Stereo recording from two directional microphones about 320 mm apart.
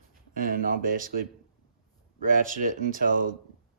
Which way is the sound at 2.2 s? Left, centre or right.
Right.